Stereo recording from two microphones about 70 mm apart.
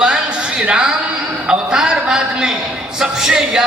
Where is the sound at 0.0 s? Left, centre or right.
Centre.